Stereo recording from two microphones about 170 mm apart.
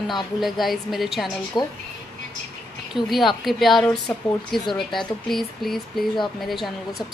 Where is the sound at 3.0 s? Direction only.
Centre (ahead or behind).